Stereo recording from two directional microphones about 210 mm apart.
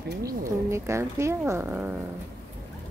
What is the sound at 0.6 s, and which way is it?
Speech, 15° right (ahead or behind).